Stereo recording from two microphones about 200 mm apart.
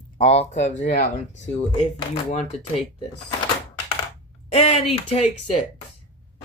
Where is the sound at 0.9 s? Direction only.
60° left (ahead or behind).